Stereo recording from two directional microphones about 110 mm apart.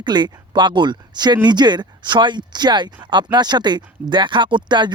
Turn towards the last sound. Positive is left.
turn(degrees=-45)  # may be behind; listen again after turning